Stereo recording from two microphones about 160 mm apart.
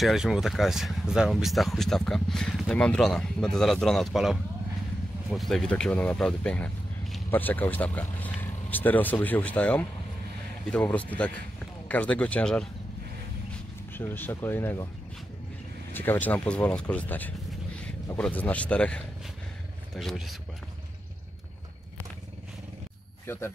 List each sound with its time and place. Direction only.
0.0 s speech: centre (ahead or behind)
13.9 s speech: 10° left (ahead or behind)
15.9 s speech: 10° left (ahead or behind)
23.2 s speech: 15° left (ahead or behind)